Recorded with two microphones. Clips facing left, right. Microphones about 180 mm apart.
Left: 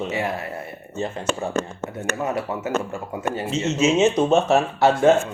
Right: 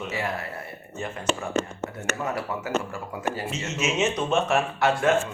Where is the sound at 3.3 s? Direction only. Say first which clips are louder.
Left 9 dB; 25° left (ahead or behind).